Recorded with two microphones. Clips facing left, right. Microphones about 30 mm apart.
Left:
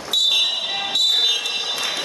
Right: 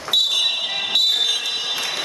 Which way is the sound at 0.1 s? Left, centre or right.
Centre.